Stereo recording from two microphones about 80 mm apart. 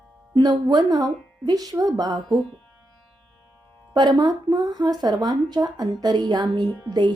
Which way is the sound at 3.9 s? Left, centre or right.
Right.